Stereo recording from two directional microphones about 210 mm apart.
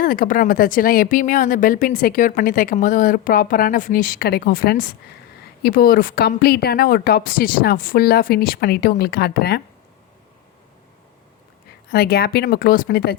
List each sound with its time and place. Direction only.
0.0 s a woman's voice: 40° left (ahead or behind)
11.9 s a woman's voice: 50° left (ahead or behind)